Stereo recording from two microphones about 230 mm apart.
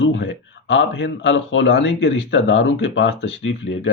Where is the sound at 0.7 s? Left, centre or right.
Left.